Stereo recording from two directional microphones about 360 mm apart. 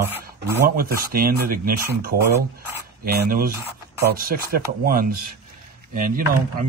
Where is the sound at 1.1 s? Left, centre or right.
Right.